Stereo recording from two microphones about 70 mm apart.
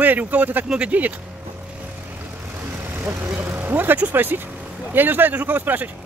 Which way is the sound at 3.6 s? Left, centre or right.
Right.